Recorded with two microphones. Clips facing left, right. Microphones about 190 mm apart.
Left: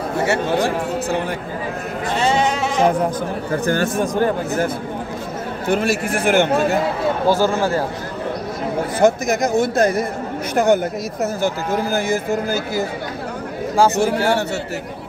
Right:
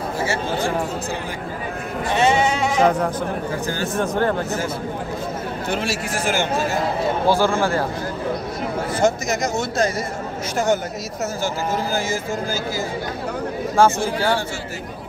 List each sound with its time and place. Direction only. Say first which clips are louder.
0.2 s a man's voice: left 6 dB; 65° left (ahead or behind)
2.5 s sheep: even; centre (ahead or behind)
3.6 s a man's voice: left 6 dB; 60° left (ahead or behind)
3.9 s speech: left 2 dB; 15° left (ahead or behind)
5.7 s a man's voice: left 7 dB; 55° left (ahead or behind)
7.2 s speech: left 1 dB; 45° left (ahead or behind)
9.0 s a man's voice: left 5 dB; 55° left (ahead or behind)